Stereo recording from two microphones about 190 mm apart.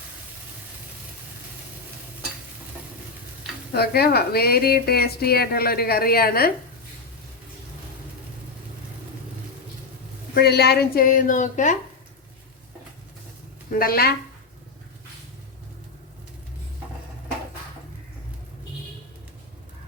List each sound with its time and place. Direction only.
3.7 s a woman's voice: 55° left (ahead or behind)
10.3 s a woman's voice: 60° left (ahead or behind); by 11.8 s 40° left (ahead or behind)
13.7 s a woman's voice: 50° left (ahead or behind)